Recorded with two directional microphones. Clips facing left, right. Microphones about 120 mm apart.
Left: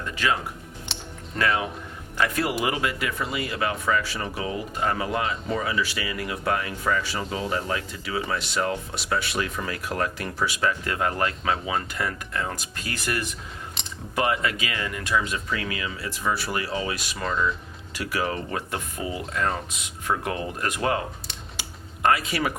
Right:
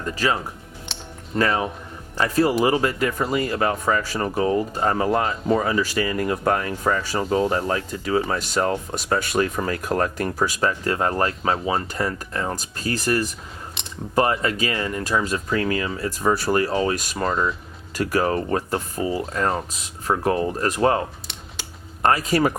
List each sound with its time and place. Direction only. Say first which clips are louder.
0.0 s speech: right 3 dB; 35° right (ahead or behind)
0.9 s music: right 1 dB; centre (ahead or behind)
1.4 s speech: right 3 dB; 35° right (ahead or behind)
13.8 s keys jangling: right 1 dB; centre (ahead or behind)
14.2 s speech: right 4 dB; 35° right (ahead or behind)
22.0 s speech: right 4 dB; 40° right (ahead or behind)